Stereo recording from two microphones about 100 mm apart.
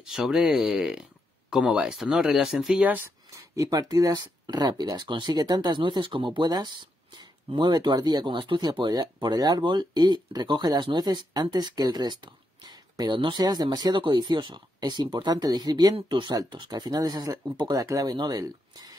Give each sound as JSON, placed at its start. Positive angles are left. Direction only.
{"t": 0.0, "sound": "speech", "side_deg": -5}
{"t": 3.3, "sound": "speech", "side_deg": -35}